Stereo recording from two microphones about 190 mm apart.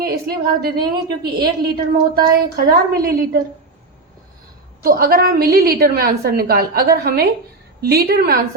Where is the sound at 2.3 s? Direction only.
55° right (ahead or behind).